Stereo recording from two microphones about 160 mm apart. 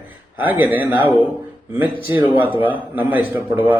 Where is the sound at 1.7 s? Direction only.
15° right (ahead or behind).